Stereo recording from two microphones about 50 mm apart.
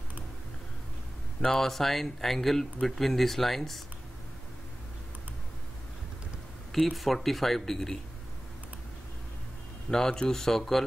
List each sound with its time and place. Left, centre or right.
1.4 s speech: centre
6.7 s speech: centre
9.8 s speech: centre